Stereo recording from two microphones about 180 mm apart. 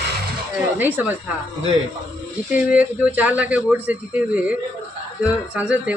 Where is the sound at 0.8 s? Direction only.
10° right (ahead or behind).